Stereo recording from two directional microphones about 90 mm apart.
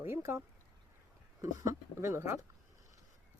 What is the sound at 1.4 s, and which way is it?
Speech, 35° right (ahead or behind).